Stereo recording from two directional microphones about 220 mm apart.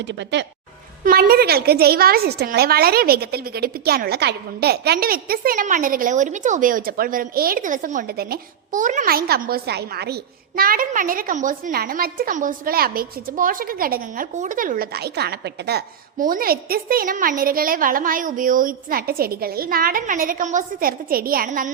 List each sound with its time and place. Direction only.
0.0 s speech: 55° right (ahead or behind)
1.0 s a woman's voice: 45° right (ahead or behind)